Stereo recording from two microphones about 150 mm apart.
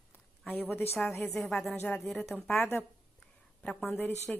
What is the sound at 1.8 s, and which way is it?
Speech, 15° left (ahead or behind).